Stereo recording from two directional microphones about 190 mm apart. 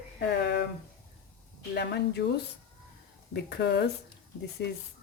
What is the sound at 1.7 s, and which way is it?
Speech, 60° left (ahead or behind).